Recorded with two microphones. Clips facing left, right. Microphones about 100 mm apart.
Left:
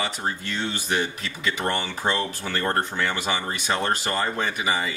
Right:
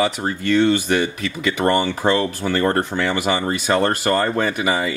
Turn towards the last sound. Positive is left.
turn(degrees=-80)